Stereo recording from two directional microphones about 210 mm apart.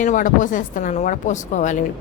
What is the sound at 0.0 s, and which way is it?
A woman's voice, 40° left (ahead or behind).